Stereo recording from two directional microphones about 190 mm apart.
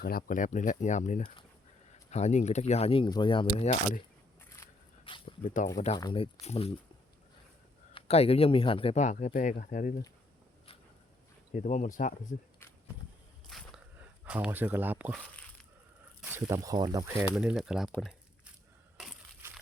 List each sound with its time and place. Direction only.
0.0 s speech: 50° left (ahead or behind); by 4.0 s 35° left (ahead or behind)
4.4 s single-lens reflex camera: 15° left (ahead or behind)
5.0 s dog: 25° left (ahead or behind)
5.5 s speech: 40° left (ahead or behind)
6.0 s speech: 20° left (ahead or behind)
6.4 s speech: 35° left (ahead or behind)
7.9 s speech: 35° left (ahead or behind)
11.5 s speech: 40° left (ahead or behind)
14.3 s speech: 10° right (ahead or behind)
16.3 s speech: 15° right (ahead or behind)
17.3 s speech: centre (ahead or behind)
17.9 s a sound: centre (ahead or behind)